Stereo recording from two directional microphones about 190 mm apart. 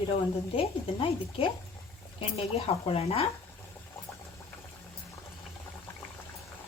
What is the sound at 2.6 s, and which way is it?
Speech, 30° left (ahead or behind).